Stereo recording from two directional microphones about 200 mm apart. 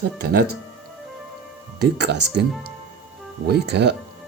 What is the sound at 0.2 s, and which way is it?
Speech, 50° right (ahead or behind).